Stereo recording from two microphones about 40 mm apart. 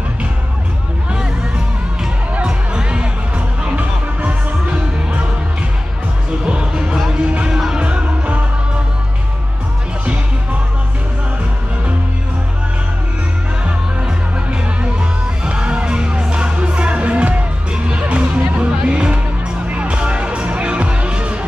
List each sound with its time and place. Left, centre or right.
2.4 s music: right
3.7 s music: right
6.4 s music: right
7.8 s music: right
14.5 s music: right